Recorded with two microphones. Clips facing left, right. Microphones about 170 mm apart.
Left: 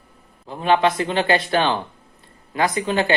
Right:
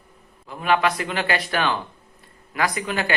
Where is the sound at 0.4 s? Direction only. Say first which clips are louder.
Left 3 dB; 30° left (ahead or behind).